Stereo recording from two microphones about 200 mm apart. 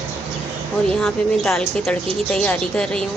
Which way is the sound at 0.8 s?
5° left (ahead or behind).